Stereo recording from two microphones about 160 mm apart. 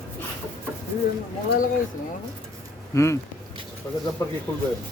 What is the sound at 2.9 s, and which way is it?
Speech, 20° left (ahead or behind).